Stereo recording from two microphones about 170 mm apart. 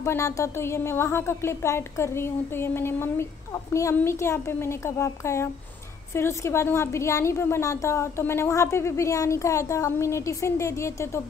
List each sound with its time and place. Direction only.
0.0 s a woman's voice: 15° left (ahead or behind)